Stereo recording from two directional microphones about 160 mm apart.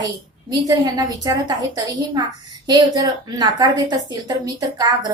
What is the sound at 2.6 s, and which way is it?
A woman's voice, 25° right (ahead or behind).